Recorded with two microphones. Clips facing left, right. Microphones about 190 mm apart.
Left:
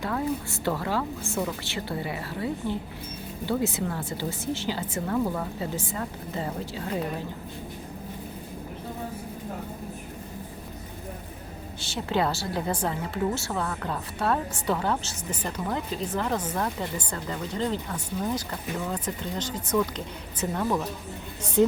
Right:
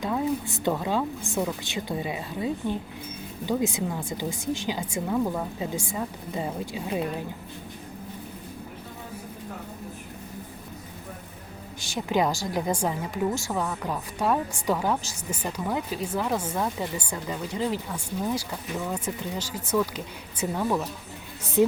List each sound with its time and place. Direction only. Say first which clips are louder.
0.0 s a woman's voice: right 2 dB; 15° right (ahead or behind)
11.8 s a woman's voice: right 2 dB; 15° right (ahead or behind)